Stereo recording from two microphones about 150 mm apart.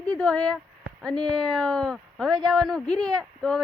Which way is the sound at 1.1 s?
30° right (ahead or behind).